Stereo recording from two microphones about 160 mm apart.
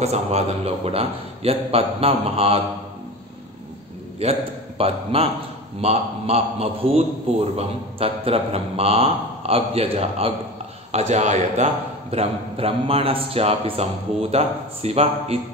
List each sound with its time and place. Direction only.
0.0 s a man's voice: 40° right (ahead or behind)
4.2 s a man's voice: 40° right (ahead or behind)